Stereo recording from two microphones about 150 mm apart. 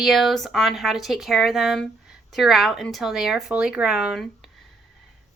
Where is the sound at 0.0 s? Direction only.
Centre (ahead or behind).